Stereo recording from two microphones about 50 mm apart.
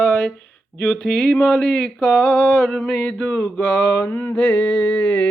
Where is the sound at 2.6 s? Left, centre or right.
Centre.